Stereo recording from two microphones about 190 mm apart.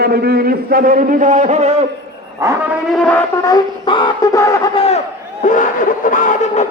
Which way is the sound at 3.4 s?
25° left (ahead or behind).